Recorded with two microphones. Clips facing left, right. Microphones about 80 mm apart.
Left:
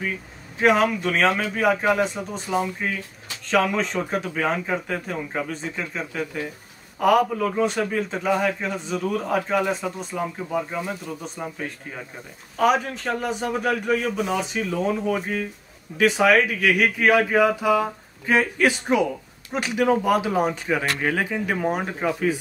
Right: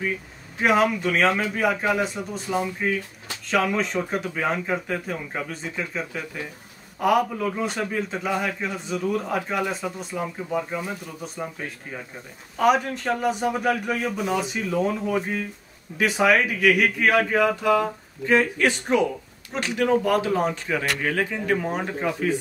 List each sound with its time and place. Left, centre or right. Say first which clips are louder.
0.6 s a man's voice: left 1 dB; centre